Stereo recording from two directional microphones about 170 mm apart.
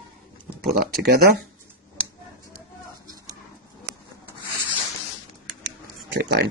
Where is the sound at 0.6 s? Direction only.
65° right (ahead or behind).